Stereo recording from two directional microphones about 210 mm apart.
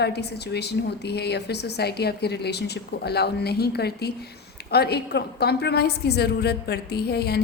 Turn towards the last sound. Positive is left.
turn(degrees=50)  # may be behind; listen again after turning